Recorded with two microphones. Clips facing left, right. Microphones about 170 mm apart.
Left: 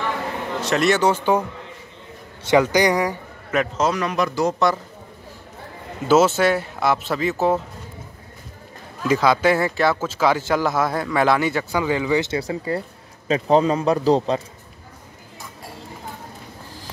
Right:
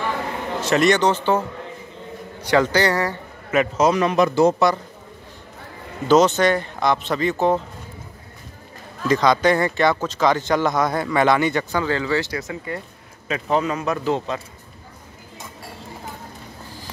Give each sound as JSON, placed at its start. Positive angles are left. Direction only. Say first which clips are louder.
{"t": 0.6, "sound": "speech", "louder": "right 2 dB", "side_deg": 0}
{"t": 2.4, "sound": "a man's voice", "louder": "left 2 dB", "side_deg": 15}
{"t": 3.5, "sound": "a man's voice", "louder": "right 3 dB", "side_deg": -10}
{"t": 3.9, "sound": "speech", "louder": "right 5 dB", "side_deg": -25}
{"t": 6.0, "sound": "speech", "louder": "right 1 dB", "side_deg": 5}
{"t": 9.0, "sound": "speech", "louder": "even", "side_deg": 5}
{"t": 12.4, "sound": "speech", "louder": "left 5 dB", "side_deg": 30}